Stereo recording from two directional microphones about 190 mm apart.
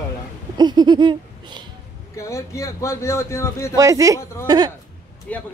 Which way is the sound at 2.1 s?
15° left (ahead or behind).